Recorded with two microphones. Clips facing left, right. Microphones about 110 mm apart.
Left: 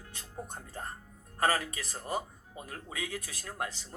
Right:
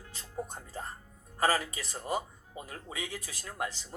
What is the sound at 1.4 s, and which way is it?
Speech, 30° right (ahead or behind).